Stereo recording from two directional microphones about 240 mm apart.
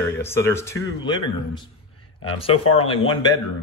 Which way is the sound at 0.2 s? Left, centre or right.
Centre.